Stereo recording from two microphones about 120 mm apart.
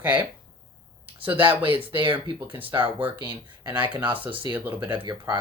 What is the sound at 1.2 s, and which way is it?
Speech, 45° right (ahead or behind).